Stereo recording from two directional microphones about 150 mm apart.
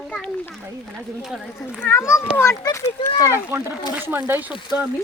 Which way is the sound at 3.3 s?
15° right (ahead or behind).